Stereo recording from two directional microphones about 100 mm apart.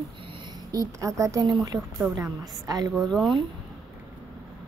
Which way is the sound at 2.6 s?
40° right (ahead or behind).